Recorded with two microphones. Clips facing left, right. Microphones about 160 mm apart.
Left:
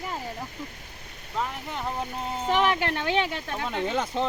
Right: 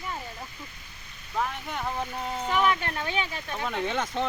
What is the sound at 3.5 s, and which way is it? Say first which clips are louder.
Speech: even; centre (ahead or behind).